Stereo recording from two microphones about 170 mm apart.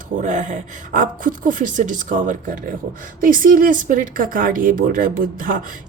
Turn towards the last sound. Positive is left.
turn(degrees=-55)  # may be behind; listen again after turning